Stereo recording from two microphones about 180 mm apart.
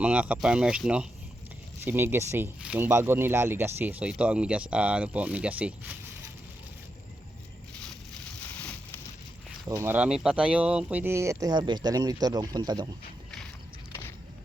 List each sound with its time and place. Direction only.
0.0 s speech: 5° right (ahead or behind)
8.4 s a sound: 10° left (ahead or behind)
9.6 s speech: 15° right (ahead or behind)